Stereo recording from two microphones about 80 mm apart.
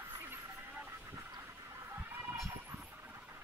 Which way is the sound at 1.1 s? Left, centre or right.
Right.